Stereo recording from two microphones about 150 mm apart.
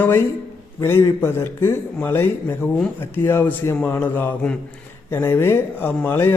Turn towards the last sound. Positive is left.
turn(degrees=15)  # may be behind; listen again after turning